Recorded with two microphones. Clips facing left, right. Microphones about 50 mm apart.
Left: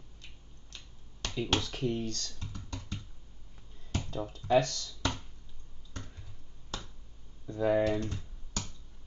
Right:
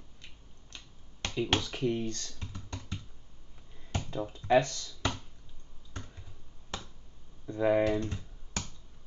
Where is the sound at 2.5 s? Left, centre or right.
Right.